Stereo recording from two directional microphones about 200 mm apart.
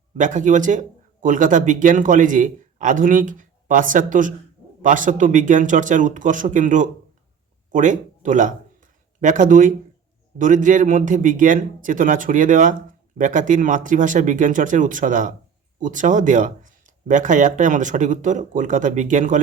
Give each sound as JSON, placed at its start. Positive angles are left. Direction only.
{"t": 0.2, "sound": "speech", "side_deg": -40}